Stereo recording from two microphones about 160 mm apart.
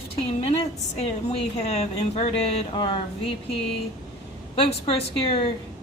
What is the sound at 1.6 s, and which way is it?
A woman's voice, 40° left (ahead or behind).